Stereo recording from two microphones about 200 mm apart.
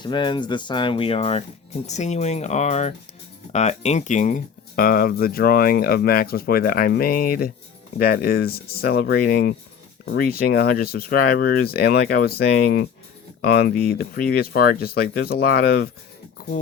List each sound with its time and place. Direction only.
0.0 s speech: 20° left (ahead or behind); by 16.5 s 45° left (ahead or behind)